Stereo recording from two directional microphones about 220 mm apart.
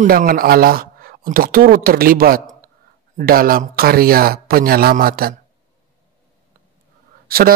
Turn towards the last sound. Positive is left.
turn(degrees=-40)  # may be behind; listen again after turning